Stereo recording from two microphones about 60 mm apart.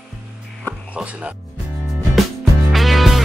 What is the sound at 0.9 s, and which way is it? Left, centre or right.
Speech, right.